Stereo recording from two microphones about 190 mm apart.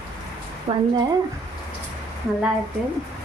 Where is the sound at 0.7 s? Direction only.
30° right (ahead or behind).